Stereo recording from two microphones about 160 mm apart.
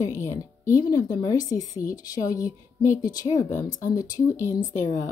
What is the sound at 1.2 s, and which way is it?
A woman's voice, 25° left (ahead or behind).